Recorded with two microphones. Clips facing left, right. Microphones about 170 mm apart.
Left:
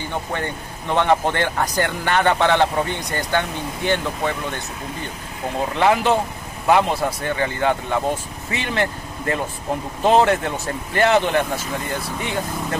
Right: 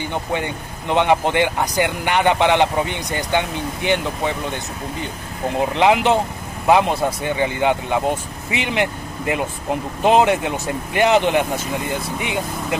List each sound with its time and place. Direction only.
0.1 s speech: 15° right (ahead or behind)
5.8 s speech: 20° right (ahead or behind)